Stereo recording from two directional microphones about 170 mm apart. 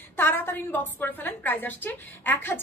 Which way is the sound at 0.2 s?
15° left (ahead or behind).